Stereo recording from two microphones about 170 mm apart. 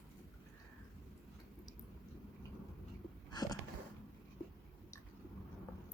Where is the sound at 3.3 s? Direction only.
25° left (ahead or behind).